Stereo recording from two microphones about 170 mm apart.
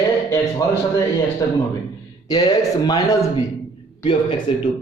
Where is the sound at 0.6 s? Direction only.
20° left (ahead or behind).